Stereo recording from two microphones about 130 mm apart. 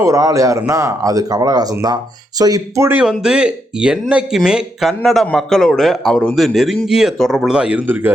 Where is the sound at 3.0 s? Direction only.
5° right (ahead or behind).